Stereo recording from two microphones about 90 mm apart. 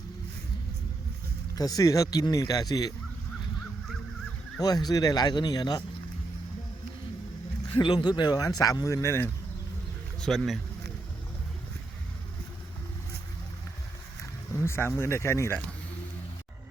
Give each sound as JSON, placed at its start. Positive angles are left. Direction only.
{"t": 1.5, "sound": "speech", "side_deg": 45}
{"t": 4.6, "sound": "speech", "side_deg": 45}
{"t": 7.8, "sound": "speech", "side_deg": 55}
{"t": 10.2, "sound": "speech", "side_deg": 5}
{"t": 14.5, "sound": "speech", "side_deg": 30}